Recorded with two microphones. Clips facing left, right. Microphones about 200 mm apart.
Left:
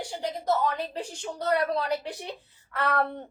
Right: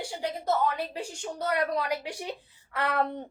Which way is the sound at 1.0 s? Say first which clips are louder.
Left 1 dB; 10° right (ahead or behind).